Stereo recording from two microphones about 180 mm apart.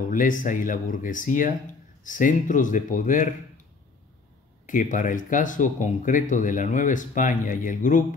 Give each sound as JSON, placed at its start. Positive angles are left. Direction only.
{"t": 0.1, "sound": "speech", "side_deg": 45}
{"t": 4.6, "sound": "speech", "side_deg": 45}